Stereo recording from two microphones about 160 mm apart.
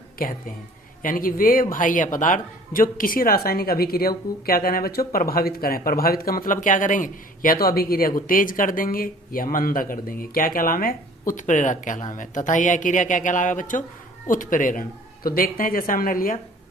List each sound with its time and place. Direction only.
0.2 s speech: 65° left (ahead or behind)